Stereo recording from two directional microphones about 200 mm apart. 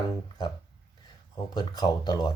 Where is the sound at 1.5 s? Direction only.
20° left (ahead or behind).